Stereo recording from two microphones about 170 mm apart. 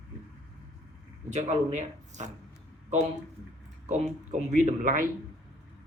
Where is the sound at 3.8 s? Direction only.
45° right (ahead or behind).